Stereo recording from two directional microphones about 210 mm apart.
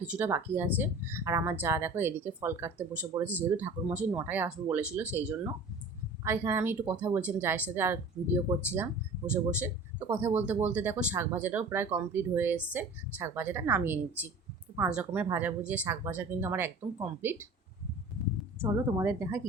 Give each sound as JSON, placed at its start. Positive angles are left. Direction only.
{"t": 0.0, "sound": "speech", "side_deg": -5}
{"t": 6.2, "sound": "speech", "side_deg": -10}
{"t": 18.6, "sound": "speech", "side_deg": -10}